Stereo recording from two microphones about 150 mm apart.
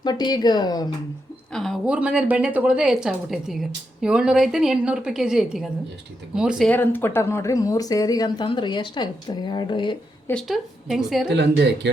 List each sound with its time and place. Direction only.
0.0 s speech: 30° left (ahead or behind)
1.5 s a woman's voice: centre (ahead or behind)
6.7 s speech: 15° left (ahead or behind); by 10.0 s 30° left (ahead or behind)
10.4 s a woman's voice: centre (ahead or behind)